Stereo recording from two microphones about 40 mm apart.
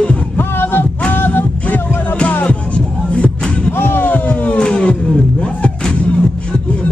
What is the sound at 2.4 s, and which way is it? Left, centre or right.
Music, left.